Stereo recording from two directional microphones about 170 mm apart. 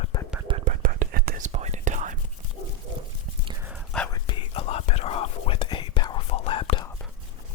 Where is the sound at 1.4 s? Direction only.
45° right (ahead or behind).